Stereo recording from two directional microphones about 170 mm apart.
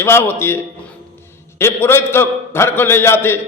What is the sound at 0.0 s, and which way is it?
A man's voice, 15° left (ahead or behind).